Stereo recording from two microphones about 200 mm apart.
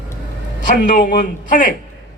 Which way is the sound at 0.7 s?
40° left (ahead or behind).